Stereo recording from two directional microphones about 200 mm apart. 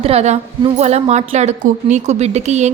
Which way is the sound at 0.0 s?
30° right (ahead or behind).